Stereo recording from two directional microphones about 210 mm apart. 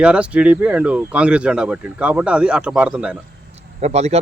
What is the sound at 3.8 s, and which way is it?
Speech, 30° right (ahead or behind).